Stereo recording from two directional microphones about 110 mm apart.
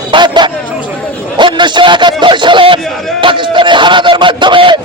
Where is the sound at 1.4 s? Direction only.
45° right (ahead or behind).